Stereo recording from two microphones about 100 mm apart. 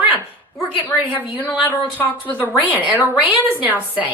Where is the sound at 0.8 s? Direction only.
20° right (ahead or behind).